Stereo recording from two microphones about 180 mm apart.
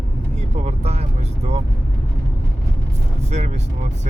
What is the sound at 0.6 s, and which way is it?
Vehicle, 35° right (ahead or behind).